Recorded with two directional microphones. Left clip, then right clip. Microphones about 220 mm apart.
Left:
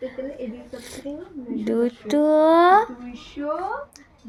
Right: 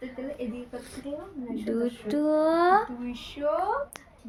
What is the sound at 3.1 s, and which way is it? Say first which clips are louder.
Speech: even; 50° right (ahead or behind).